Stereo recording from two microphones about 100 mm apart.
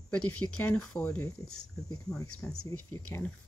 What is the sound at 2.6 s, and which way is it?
Speech, 25° left (ahead or behind).